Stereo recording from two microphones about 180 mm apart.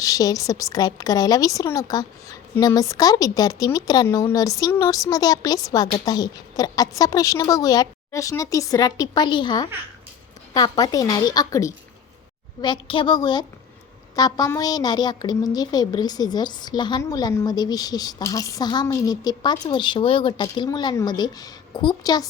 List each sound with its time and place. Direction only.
0.0 s a woman's voice: 20° left (ahead or behind)